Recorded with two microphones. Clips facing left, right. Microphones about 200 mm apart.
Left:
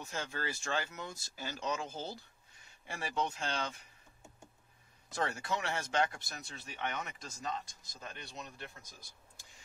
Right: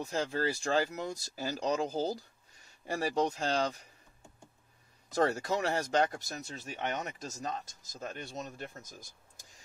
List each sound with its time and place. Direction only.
0.0 s speech: 35° right (ahead or behind)
5.1 s speech: 40° right (ahead or behind)